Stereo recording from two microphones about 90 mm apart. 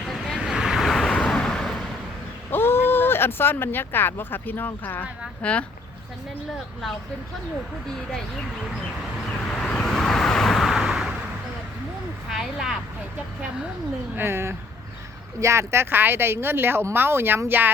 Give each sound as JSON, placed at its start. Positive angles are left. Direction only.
{"t": 0.1, "sound": "vehicle", "side_deg": 0}
{"t": 2.5, "sound": "speech", "side_deg": 25}
{"t": 9.5, "sound": "vehicle", "side_deg": 10}
{"t": 12.3, "sound": "speech", "side_deg": -5}
{"t": 14.2, "sound": "speech", "side_deg": -25}